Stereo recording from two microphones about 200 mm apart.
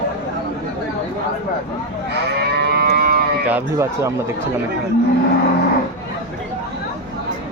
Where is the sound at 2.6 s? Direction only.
50° right (ahead or behind).